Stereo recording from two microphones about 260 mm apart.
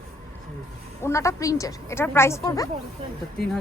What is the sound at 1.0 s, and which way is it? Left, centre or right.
A woman's voice, centre.